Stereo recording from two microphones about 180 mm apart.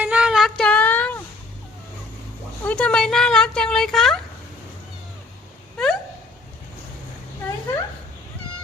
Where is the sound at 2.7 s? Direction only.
5° left (ahead or behind).